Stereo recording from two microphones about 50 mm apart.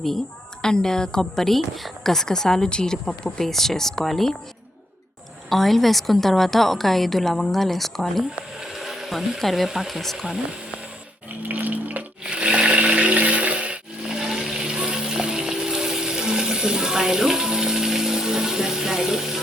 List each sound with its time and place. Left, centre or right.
0.6 s a woman's voice: centre
5.5 s a woman's voice: centre
8.7 s a sound: centre
9.6 s a woman's voice: centre
11.4 s water: right
12.2 s blender: centre
14.1 s a sound: centre